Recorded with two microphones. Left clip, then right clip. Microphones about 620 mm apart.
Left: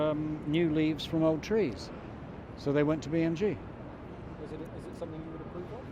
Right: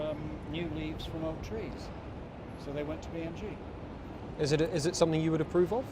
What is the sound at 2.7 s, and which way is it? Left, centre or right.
Speech, left.